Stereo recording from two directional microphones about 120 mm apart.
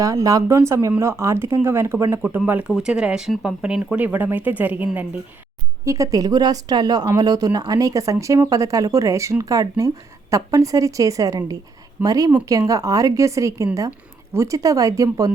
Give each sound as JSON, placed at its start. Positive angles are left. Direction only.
{"t": 0.0, "sound": "speech", "side_deg": -25}
{"t": 5.8, "sound": "speech", "side_deg": -25}